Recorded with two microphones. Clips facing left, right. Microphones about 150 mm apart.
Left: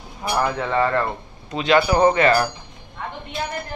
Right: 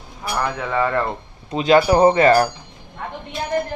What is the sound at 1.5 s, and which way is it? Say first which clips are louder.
Speech: right 3 dB; 35° right (ahead or behind).